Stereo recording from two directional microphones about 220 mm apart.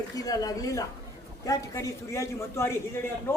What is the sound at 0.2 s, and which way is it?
Speech, 15° left (ahead or behind).